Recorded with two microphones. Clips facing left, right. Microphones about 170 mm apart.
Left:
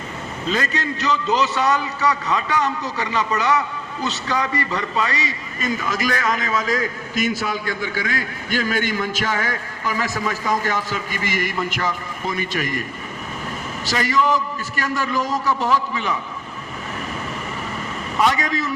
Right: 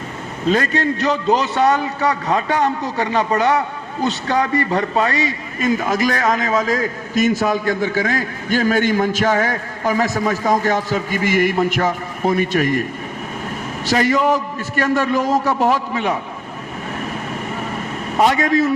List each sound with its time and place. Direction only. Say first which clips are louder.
0.4 s a man's voice: right 7 dB; 50° right (ahead or behind)
13.9 s a man's voice: right 4 dB; 50° right (ahead or behind)
18.3 s a man's voice: right 8 dB; 50° right (ahead or behind)